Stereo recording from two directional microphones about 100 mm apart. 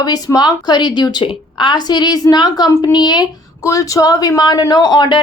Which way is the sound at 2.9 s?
45° left (ahead or behind).